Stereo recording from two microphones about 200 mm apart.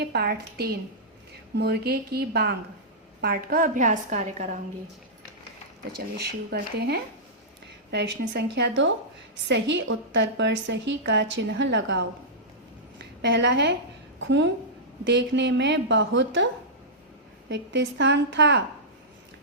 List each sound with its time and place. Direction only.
0.0 s a woman's voice: 55° right (ahead or behind); by 4.6 s 35° right (ahead or behind)
6.1 s a woman's voice: 55° right (ahead or behind)
17.5 s a woman's voice: 60° right (ahead or behind)